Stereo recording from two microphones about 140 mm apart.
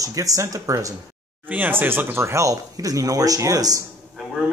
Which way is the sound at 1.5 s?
15° right (ahead or behind).